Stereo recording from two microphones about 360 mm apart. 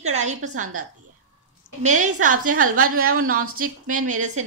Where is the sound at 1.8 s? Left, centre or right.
Centre.